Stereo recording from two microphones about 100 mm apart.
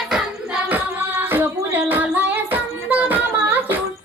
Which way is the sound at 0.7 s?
20° right (ahead or behind).